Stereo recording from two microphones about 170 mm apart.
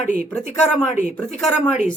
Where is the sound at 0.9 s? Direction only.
45° left (ahead or behind).